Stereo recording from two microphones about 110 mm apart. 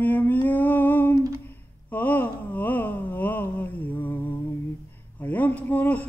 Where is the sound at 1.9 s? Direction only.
15° left (ahead or behind).